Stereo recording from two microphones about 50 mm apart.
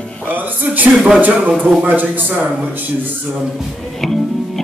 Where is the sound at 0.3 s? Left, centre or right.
Right.